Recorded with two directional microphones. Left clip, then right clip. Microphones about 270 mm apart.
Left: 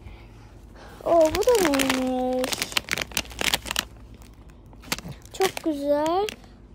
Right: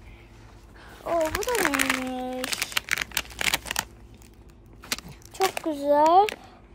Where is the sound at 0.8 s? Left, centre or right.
Centre.